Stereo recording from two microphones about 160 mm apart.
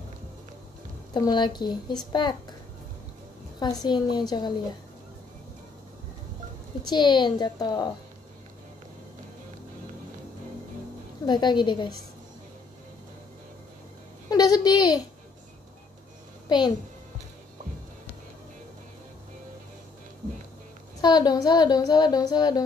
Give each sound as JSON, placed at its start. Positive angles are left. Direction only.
{"t": 1.1, "sound": "speech", "side_deg": 25}
{"t": 3.8, "sound": "speech", "side_deg": 25}
{"t": 6.9, "sound": "speech", "side_deg": 25}
{"t": 11.2, "sound": "speech", "side_deg": 25}
{"t": 14.3, "sound": "a sound", "side_deg": 25}
{"t": 16.4, "sound": "a child's voice", "side_deg": 25}
{"t": 21.0, "sound": "speech", "side_deg": 25}